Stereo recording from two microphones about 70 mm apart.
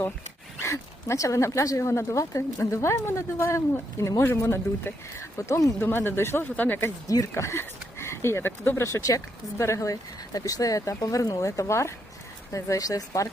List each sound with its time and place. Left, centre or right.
0.6 s speech: left
5.8 s speech: left
6.4 s speech: left
7.3 s speech: left